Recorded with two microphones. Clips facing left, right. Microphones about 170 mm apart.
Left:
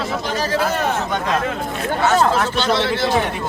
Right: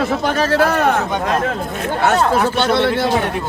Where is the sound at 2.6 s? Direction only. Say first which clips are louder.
Right 3 dB; 55° right (ahead or behind).